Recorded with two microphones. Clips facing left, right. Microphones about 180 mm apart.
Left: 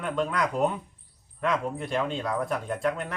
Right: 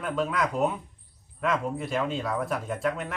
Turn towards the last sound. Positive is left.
turn(degrees=0)  # may be behind; listen again after turning